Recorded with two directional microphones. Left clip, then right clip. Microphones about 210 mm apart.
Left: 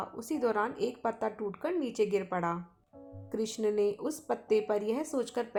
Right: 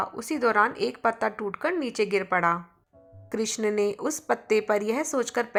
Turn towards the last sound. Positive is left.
turn(degrees=-15)  # may be behind; listen again after turning